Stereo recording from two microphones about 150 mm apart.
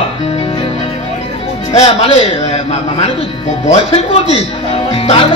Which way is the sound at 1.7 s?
40° left (ahead or behind).